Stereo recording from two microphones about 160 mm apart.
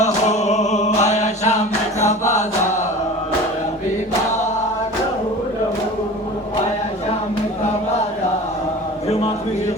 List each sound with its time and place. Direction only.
0.0 s music: 45° left (ahead or behind)